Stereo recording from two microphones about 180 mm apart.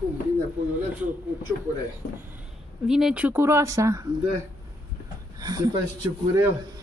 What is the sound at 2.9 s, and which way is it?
A woman's voice, 5° right (ahead or behind).